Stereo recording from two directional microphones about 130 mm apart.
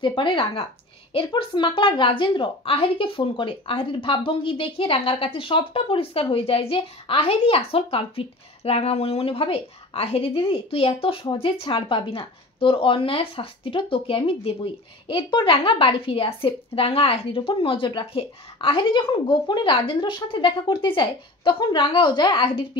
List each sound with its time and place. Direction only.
0.0 s speech: 40° left (ahead or behind)